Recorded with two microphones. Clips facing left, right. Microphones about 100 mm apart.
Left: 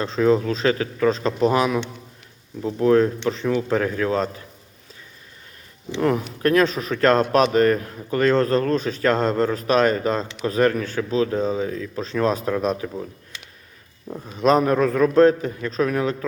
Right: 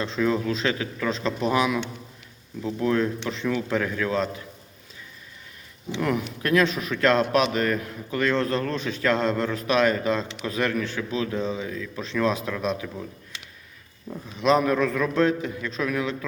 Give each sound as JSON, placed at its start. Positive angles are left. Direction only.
{"t": 0.0, "sound": "speech", "side_deg": 35}
{"t": 6.0, "sound": "speech", "side_deg": 35}
{"t": 14.3, "sound": "speech", "side_deg": 40}